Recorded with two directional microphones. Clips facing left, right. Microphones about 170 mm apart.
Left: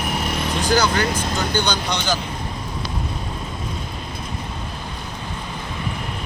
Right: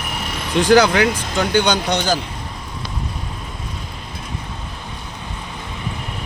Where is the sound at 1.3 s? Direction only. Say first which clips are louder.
Right 8 dB; 55° right (ahead or behind).